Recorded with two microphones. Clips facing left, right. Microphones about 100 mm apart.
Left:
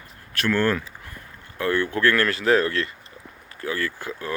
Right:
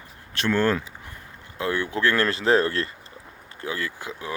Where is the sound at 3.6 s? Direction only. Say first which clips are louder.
Left 3 dB; 20° right (ahead or behind).